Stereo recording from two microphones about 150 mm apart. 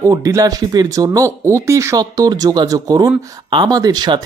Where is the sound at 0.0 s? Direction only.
20° right (ahead or behind).